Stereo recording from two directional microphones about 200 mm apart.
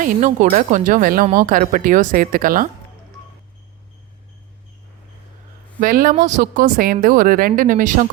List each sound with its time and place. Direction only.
0.0 s speech: 40° right (ahead or behind)
5.8 s a woman's voice: 45° right (ahead or behind)